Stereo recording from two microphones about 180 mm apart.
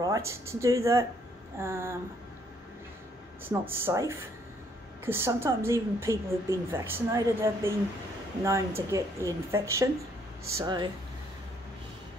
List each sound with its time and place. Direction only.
0.3 s a woman's voice: 15° right (ahead or behind)
3.4 s a woman's voice: 10° right (ahead or behind)